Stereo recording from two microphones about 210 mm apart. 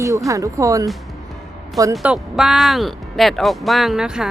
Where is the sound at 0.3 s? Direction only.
15° right (ahead or behind).